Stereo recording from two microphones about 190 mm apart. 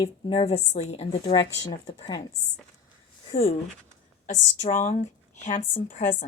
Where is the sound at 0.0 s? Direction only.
30° left (ahead or behind).